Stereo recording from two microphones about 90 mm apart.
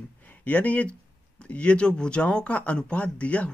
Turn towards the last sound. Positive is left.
turn(degrees=15)  # may be behind; listen again after turning